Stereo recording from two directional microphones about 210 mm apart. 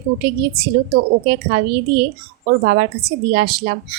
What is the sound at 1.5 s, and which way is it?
A woman's voice, 50° right (ahead or behind).